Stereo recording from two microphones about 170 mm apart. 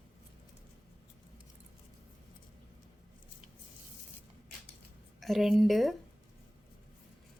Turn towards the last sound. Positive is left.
turn(degrees=0)  # may be behind; listen again after turning